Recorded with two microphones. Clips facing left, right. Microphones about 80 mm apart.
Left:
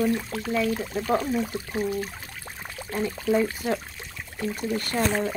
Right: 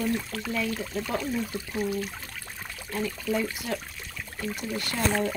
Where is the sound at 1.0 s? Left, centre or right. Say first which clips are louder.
Left 8 dB; left.